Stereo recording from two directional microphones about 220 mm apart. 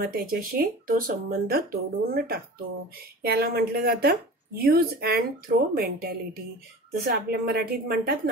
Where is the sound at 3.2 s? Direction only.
45° right (ahead or behind).